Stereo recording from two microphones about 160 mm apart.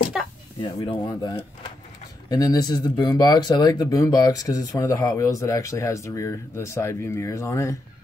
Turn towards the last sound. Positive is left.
turn(degrees=20)  # may be behind; listen again after turning